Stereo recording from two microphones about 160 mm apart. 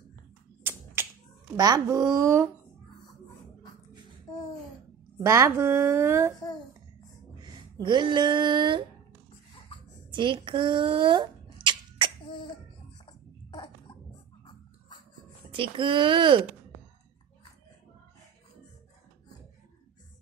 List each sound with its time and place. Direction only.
1.0 s finger snapping: 15° right (ahead or behind)
1.6 s a child's voice: 20° right (ahead or behind)
5.2 s speech: 20° right (ahead or behind)
6.3 s a child's voice: 25° left (ahead or behind)
7.4 s speech: 25° right (ahead or behind)
10.1 s a sound: 30° right (ahead or behind)
13.0 s a sound: 30° left (ahead or behind)
15.5 s speech: 30° right (ahead or behind)